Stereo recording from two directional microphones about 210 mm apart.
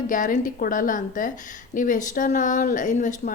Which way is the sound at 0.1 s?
40° left (ahead or behind).